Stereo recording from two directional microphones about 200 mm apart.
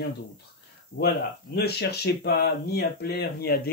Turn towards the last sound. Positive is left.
turn(degrees=55)  # may be behind; listen again after turning